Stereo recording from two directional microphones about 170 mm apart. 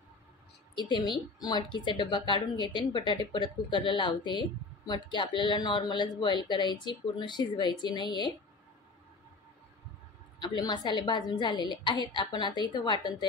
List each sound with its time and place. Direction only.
0.7 s speech: 25° left (ahead or behind)
10.4 s speech: 25° left (ahead or behind)